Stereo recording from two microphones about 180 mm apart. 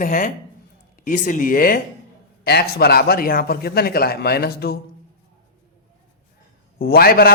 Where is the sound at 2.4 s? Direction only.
60° left (ahead or behind).